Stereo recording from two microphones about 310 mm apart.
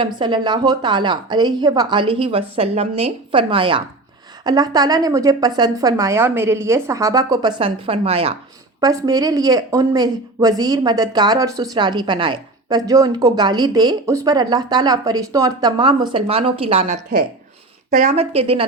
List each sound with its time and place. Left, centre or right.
0.0 s a woman's voice: centre